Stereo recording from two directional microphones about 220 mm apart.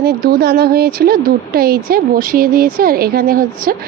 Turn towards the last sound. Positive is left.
turn(degrees=-40)  # may be behind; listen again after turning